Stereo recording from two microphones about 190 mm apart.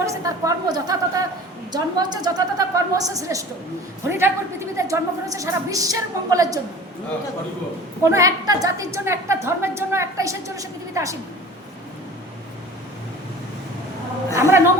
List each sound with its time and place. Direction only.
0.0 s a woman's voice: 15° right (ahead or behind)
8.0 s a woman's voice: 15° right (ahead or behind)
14.3 s a sound: 15° right (ahead or behind)